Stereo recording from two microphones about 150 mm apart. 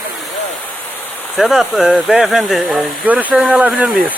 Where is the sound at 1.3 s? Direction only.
Centre (ahead or behind).